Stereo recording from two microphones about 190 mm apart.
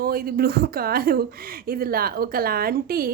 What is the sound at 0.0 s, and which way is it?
A woman's voice, 50° right (ahead or behind).